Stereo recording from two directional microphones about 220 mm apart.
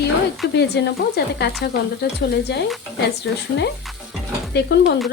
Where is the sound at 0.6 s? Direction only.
50° left (ahead or behind).